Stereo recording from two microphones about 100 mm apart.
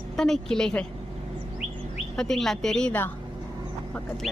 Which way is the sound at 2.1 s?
5° left (ahead or behind).